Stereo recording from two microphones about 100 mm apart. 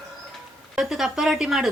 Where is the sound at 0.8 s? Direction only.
5° right (ahead or behind).